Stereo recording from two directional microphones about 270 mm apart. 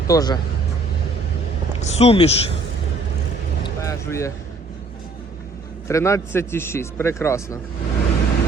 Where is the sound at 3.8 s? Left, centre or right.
Centre.